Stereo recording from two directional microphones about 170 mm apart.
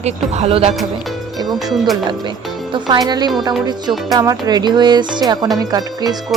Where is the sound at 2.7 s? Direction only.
25° right (ahead or behind).